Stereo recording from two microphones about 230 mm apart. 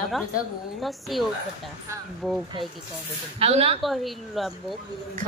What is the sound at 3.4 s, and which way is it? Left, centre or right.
Speech, right.